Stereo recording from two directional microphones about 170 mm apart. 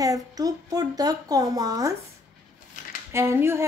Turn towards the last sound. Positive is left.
turn(degrees=-15)  # may be behind; listen again after turning